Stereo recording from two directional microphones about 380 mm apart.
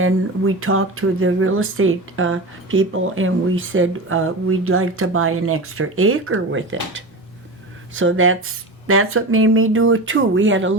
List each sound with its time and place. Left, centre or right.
0.0 s speech: right